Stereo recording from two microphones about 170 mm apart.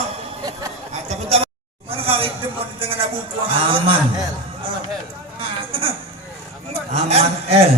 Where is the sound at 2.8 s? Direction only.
30° right (ahead or behind).